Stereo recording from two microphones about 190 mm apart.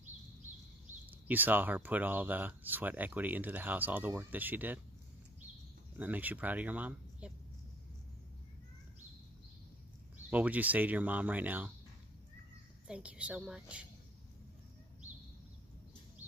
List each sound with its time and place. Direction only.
1.2 s speech: 10° right (ahead or behind)
5.9 s speech: 10° right (ahead or behind)
10.3 s speech: 10° right (ahead or behind)
12.8 s a woman's voice: 5° right (ahead or behind)